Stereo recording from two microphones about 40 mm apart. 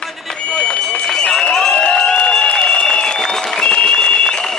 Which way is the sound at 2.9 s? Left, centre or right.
Centre.